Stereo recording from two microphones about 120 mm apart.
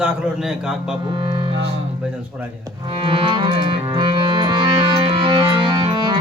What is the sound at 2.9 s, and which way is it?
Clarinet, 45° right (ahead or behind).